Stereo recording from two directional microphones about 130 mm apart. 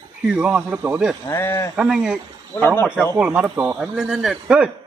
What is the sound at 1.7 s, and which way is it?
A man's voice, 5° right (ahead or behind).